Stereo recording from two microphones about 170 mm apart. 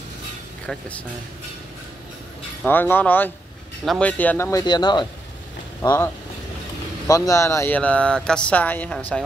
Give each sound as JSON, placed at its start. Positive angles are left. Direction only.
{"t": 0.7, "sound": "speech", "side_deg": 10}
{"t": 2.6, "sound": "speech", "side_deg": 10}
{"t": 5.8, "sound": "speech", "side_deg": 15}
{"t": 7.1, "sound": "speech", "side_deg": 20}